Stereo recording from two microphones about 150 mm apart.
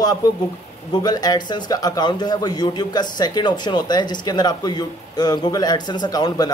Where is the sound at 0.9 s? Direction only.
25° left (ahead or behind).